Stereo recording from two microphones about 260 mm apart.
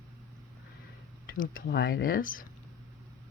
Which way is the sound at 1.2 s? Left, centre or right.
Left.